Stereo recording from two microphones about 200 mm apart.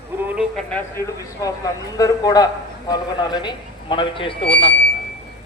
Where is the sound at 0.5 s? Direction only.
10° left (ahead or behind).